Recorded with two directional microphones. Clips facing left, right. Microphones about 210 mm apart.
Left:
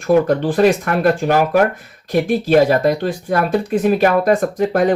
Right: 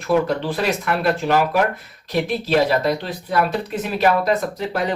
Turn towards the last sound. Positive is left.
turn(degrees=50)  # may be behind; listen again after turning